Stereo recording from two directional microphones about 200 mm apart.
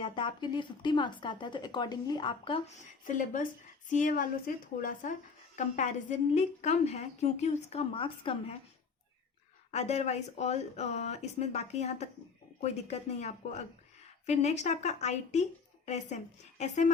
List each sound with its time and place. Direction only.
0.0 s speech: 25° left (ahead or behind)
3.0 s speech: 40° left (ahead or behind)
9.7 s speech: 35° left (ahead or behind)
16.6 s speech: 35° left (ahead or behind)